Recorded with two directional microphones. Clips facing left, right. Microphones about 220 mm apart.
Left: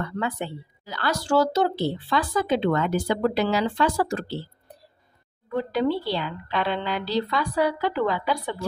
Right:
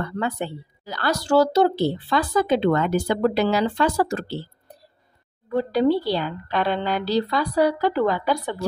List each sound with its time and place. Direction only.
0.0 s speech: 40° right (ahead or behind)
5.5 s speech: 35° right (ahead or behind)